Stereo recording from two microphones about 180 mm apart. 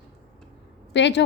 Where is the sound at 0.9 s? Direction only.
80° left.